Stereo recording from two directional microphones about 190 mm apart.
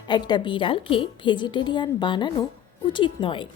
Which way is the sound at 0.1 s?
25° left (ahead or behind).